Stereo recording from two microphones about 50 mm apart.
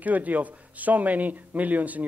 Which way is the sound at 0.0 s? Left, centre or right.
Right.